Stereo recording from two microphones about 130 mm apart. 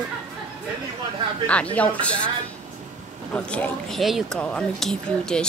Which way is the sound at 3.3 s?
10° left (ahead or behind).